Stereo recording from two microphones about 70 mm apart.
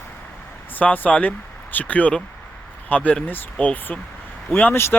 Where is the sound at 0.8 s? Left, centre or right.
Left.